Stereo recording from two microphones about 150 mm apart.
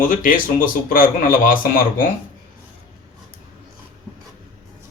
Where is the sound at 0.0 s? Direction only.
65° left (ahead or behind).